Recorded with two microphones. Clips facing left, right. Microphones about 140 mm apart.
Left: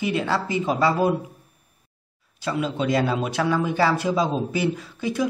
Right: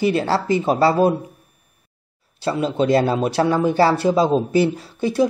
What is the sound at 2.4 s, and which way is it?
Speech, 30° right (ahead or behind).